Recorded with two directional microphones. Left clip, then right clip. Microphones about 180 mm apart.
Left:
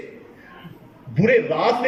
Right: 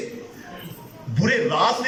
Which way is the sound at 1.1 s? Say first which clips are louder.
Left 2 dB; 25° left (ahead or behind).